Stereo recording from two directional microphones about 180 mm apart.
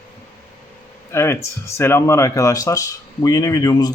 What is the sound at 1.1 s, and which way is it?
Speech, 15° left (ahead or behind).